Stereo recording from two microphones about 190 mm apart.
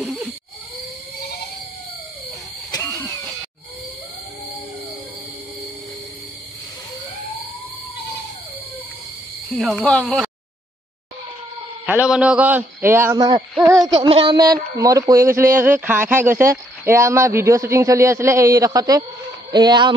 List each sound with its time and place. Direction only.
0.0 s a sound: 5° right (ahead or behind)
2.7 s vehicle: 10° left (ahead or behind)
9.5 s speech: centre (ahead or behind)
11.8 s a man's voice: 10° right (ahead or behind)